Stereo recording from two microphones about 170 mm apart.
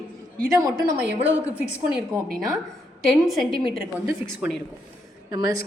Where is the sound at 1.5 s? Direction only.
15° left (ahead or behind).